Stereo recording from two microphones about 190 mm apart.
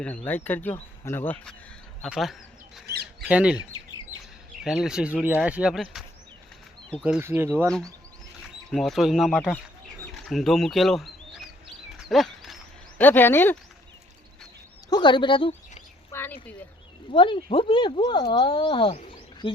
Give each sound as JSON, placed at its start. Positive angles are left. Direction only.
{"t": 0.3, "sound": "speech", "side_deg": 10}
{"t": 2.8, "sound": "a sound", "side_deg": -55}
{"t": 3.2, "sound": "speech", "side_deg": -5}
{"t": 4.6, "sound": "speech", "side_deg": 0}
{"t": 8.7, "sound": "speech", "side_deg": 0}
{"t": 11.9, "sound": "dog", "side_deg": 0}
{"t": 13.0, "sound": "speech", "side_deg": 10}
{"t": 14.8, "sound": "bird", "side_deg": 25}
{"t": 16.1, "sound": "a sound", "side_deg": 10}
{"t": 17.1, "sound": "speech", "side_deg": 25}